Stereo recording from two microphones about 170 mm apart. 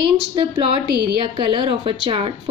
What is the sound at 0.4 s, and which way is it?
Speech, 35° right (ahead or behind).